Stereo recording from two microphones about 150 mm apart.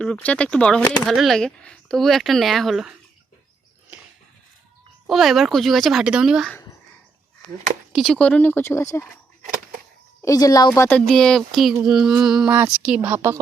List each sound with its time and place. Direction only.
0.0 s speech: 10° left (ahead or behind)
5.0 s speech: centre (ahead or behind)
7.9 s speech: 5° left (ahead or behind)
9.4 s a sound: 65° right (ahead or behind)
10.2 s speech: 25° left (ahead or behind)
10.8 s speech: 10° left (ahead or behind); by 13.4 s 15° right (ahead or behind)